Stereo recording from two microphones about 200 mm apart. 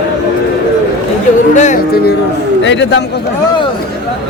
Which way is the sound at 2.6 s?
65° left (ahead or behind).